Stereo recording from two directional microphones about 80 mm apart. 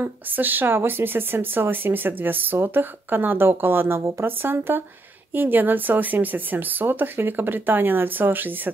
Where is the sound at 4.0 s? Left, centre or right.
Right.